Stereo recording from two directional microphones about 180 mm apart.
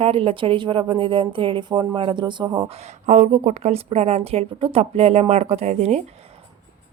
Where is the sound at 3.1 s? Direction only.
40° right (ahead or behind).